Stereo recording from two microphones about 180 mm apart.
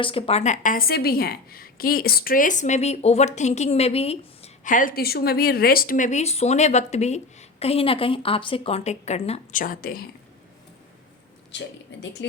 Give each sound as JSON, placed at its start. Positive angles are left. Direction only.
{"t": 0.0, "sound": "a woman's voice", "side_deg": 30}
{"t": 9.6, "sound": "speech", "side_deg": 50}